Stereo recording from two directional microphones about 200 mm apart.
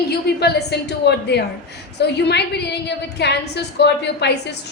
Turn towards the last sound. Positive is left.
turn(degrees=55)  # may be behind; listen again after turning